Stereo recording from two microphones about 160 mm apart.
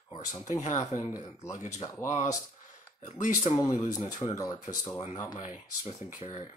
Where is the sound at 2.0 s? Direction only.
50° left (ahead or behind).